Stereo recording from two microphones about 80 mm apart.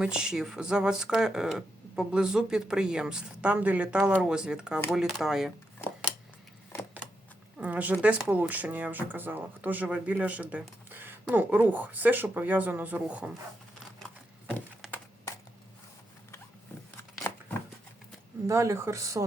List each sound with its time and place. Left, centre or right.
0.0 s speech: centre
7.6 s speech: centre
17.0 s a sound: left
18.4 s speech: right